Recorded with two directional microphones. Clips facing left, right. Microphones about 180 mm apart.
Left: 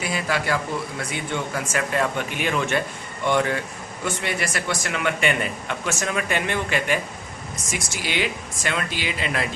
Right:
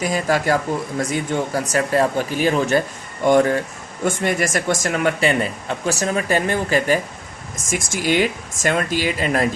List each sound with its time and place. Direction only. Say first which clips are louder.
0.0 s speech: right 6 dB; 40° right (ahead or behind)